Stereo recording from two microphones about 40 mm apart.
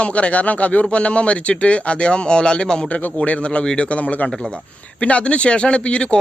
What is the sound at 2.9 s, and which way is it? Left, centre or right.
A man's voice, left.